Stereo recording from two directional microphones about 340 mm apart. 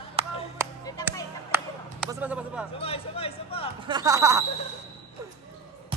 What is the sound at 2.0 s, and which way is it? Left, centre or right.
Speech, centre.